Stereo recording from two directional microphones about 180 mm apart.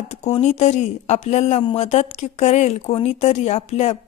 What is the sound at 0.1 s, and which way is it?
Speech, 35° left (ahead or behind).